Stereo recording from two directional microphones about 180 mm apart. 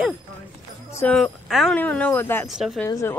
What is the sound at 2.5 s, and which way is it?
Speech, centre (ahead or behind).